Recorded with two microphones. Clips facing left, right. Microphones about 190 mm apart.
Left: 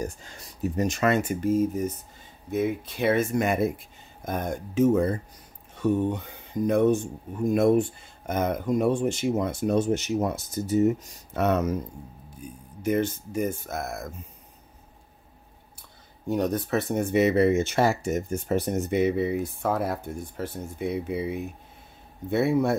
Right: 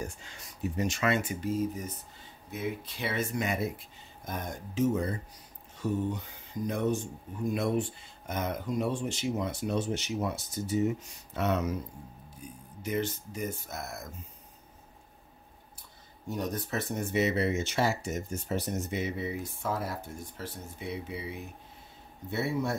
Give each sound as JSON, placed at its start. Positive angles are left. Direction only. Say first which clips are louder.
{"t": 0.0, "sound": "speech", "louder": "left 6 dB", "side_deg": 40}
{"t": 12.8, "sound": "speech", "louder": "left 7 dB", "side_deg": 50}
{"t": 16.3, "sound": "speech", "louder": "left 8 dB", "side_deg": 65}
{"t": 22.3, "sound": "speech", "louder": "left 8 dB", "side_deg": 55}